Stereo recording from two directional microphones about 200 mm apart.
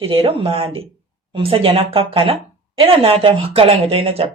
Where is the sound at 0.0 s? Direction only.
30° right (ahead or behind).